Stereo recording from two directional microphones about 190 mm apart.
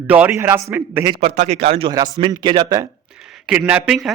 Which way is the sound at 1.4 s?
35° right (ahead or behind).